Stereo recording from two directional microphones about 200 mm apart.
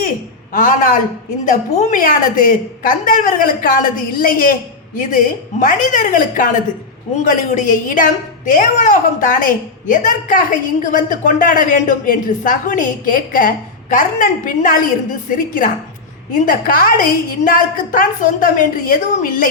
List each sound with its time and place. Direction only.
0.5 s a woman's voice: 40° left (ahead or behind)